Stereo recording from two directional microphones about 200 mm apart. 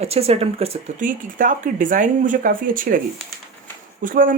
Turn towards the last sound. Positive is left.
turn(degrees=-45)  # may be behind; listen again after turning